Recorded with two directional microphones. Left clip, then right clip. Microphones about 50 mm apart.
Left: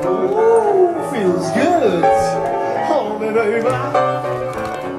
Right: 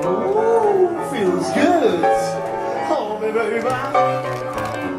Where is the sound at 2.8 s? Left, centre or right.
Centre.